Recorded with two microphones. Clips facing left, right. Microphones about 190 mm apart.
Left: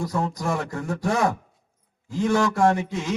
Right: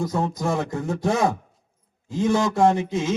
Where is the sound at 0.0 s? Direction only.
20° right (ahead or behind).